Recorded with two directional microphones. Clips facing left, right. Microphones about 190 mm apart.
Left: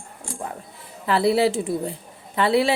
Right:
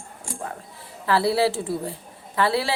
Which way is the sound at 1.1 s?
20° left (ahead or behind).